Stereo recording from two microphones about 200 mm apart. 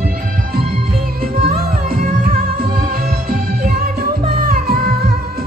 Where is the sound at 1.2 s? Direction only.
50° right (ahead or behind).